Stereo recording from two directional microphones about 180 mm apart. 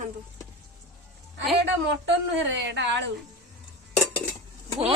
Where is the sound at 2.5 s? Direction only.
80° right.